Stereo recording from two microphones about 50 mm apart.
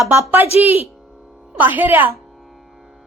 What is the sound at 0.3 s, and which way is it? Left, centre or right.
A woman's voice, right.